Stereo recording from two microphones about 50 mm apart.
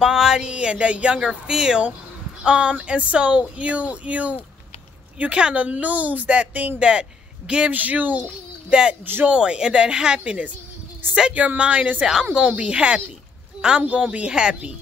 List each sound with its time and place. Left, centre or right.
0.0 s speech: centre
0.5 s speech: right
1.2 s speech: centre; by 9.3 s right
9.3 s speech: centre